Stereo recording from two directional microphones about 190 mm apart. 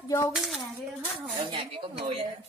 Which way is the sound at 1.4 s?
30° right (ahead or behind).